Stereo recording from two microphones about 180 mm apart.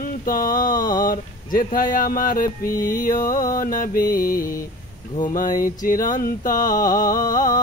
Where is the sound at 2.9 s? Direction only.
50° left (ahead or behind).